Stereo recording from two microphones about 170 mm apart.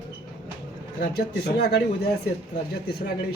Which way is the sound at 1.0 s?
75° left (ahead or behind).